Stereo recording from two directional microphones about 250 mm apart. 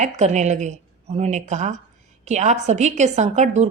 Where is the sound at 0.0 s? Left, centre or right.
Right.